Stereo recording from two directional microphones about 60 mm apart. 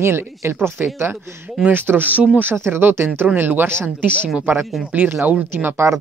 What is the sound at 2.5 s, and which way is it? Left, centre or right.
Speech, right.